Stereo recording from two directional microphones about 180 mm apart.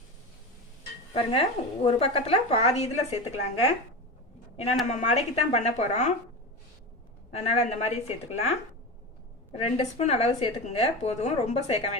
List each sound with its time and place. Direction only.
1.1 s a woman's voice: 30° left (ahead or behind)
7.3 s a woman's voice: 35° left (ahead or behind)
9.5 s a woman's voice: 35° left (ahead or behind)